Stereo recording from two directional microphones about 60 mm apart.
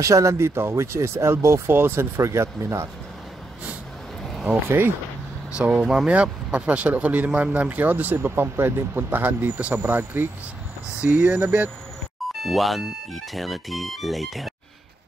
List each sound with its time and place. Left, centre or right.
0.0 s speech: right
1.7 s speech: right
4.2 s vehicle: centre
4.6 s speech: right
5.5 s speech: right
12.3 s speech: centre